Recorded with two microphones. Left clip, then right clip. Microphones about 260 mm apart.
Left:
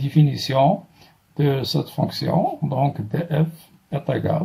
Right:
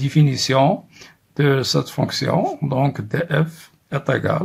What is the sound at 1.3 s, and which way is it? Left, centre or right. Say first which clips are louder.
Speech: right 4 dB; right.